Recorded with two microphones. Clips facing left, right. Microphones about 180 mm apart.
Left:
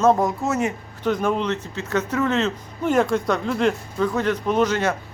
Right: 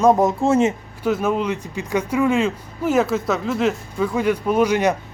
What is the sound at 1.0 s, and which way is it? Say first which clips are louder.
Speech: right 1 dB; 5° right (ahead or behind).